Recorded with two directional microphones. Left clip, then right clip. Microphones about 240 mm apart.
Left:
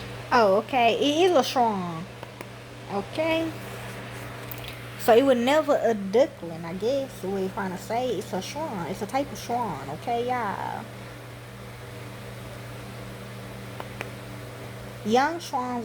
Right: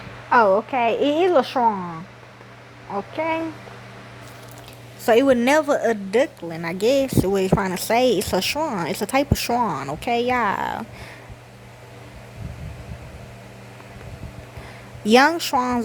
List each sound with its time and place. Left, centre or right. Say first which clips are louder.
0.3 s a woman's voice: right 4 dB; centre
2.9 s a woman's voice: right 2 dB; centre
5.0 s a woman's voice: right 3 dB; right
6.6 s speech: right 8 dB; right
15.0 s speech: right 8 dB; right